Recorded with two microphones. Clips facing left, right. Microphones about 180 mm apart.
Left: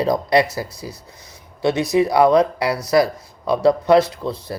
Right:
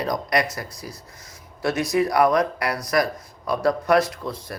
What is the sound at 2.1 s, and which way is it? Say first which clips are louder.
Speech: left 6 dB; 25° left (ahead or behind).